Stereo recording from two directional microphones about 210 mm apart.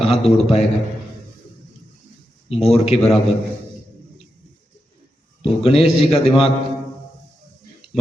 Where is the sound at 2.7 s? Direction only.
30° left (ahead or behind).